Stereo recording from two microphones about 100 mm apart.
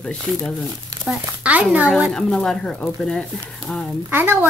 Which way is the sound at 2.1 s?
5° left (ahead or behind).